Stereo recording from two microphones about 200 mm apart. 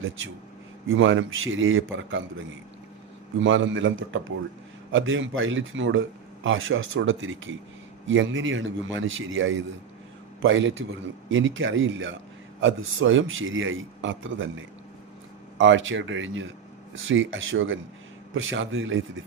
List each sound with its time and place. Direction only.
0.9 s a man's voice: 70° right (ahead or behind)
3.4 s a man's voice: 70° right (ahead or behind)
15.5 s a man's voice: 70° right (ahead or behind)